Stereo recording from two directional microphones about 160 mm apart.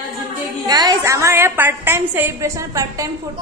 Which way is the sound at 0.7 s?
25° right (ahead or behind).